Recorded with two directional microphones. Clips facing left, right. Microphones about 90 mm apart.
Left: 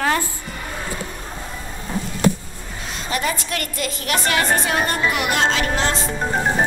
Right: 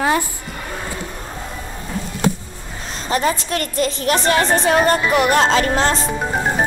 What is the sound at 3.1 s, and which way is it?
A woman's voice, 35° right (ahead or behind).